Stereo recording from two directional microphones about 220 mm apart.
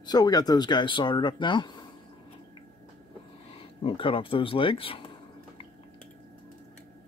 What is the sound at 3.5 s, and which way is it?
Speech, 25° left (ahead or behind).